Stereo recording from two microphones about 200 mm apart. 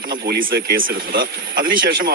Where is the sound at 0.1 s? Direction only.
50° right (ahead or behind).